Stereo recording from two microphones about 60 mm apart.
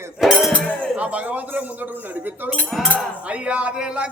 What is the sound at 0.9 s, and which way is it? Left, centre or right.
Speech, right.